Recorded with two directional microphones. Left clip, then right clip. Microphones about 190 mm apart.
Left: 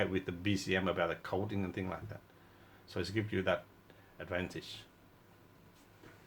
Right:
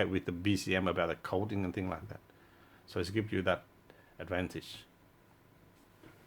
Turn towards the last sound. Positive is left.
turn(degrees=-60)  # may be behind; listen again after turning